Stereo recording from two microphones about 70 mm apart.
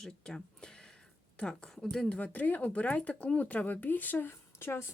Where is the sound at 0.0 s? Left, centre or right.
Centre.